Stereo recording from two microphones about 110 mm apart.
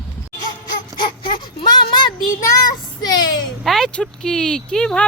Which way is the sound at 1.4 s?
40° left (ahead or behind).